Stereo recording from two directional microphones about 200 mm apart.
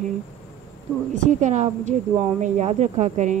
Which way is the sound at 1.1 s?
35° right (ahead or behind).